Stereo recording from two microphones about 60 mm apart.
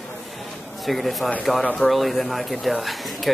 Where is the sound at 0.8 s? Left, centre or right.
Centre.